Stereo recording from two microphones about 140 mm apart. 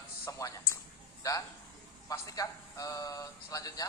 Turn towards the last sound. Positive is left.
turn(degrees=25)  # may be behind; listen again after turning